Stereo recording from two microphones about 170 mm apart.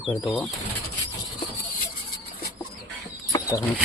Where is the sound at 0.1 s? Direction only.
Centre (ahead or behind).